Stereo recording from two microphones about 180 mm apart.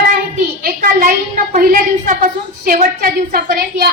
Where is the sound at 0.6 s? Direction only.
50° right (ahead or behind).